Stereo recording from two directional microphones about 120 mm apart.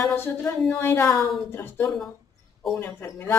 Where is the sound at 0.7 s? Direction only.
20° left (ahead or behind).